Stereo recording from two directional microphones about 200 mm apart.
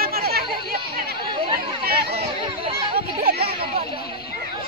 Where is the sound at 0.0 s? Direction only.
50° right (ahead or behind).